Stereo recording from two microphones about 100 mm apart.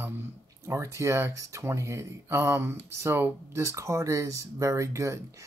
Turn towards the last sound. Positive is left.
turn(degrees=-30)  # may be behind; listen again after turning